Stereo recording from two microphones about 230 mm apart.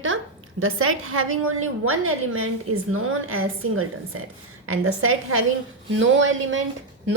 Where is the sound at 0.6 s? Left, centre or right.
Right.